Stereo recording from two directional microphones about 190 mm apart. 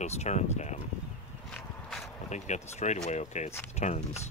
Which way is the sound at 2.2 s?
40° left (ahead or behind).